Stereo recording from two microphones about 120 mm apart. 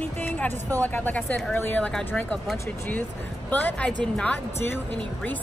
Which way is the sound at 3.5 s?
15° left (ahead or behind).